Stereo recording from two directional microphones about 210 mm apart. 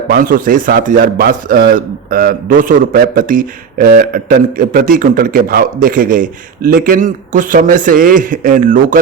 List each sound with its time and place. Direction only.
0.1 s a man's voice: 40° right (ahead or behind)